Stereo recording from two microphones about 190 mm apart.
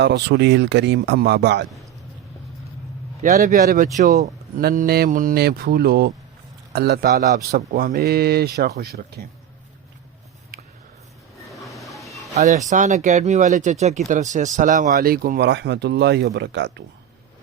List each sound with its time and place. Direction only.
0.0 s speech: 60° right (ahead or behind)
3.2 s speech: 40° right (ahead or behind); by 7.1 s 55° right (ahead or behind)
7.2 s speech: 45° right (ahead or behind)
11.4 s a sound: centre (ahead or behind)
12.3 s speech: 35° right (ahead or behind)
15.4 s speech: 65° right (ahead or behind)